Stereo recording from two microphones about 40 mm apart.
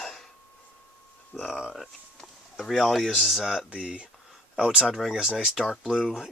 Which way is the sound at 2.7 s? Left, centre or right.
Centre.